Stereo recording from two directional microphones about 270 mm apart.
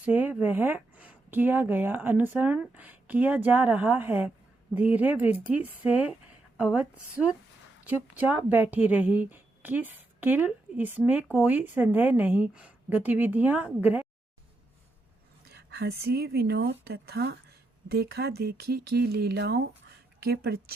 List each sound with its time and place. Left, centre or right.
0.0 s a woman's voice: centre
15.5 s speech: right